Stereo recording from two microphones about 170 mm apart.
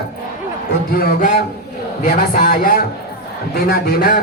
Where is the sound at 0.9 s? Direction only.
60° left (ahead or behind).